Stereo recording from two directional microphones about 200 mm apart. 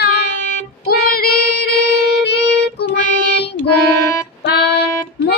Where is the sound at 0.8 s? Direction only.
50° left (ahead or behind).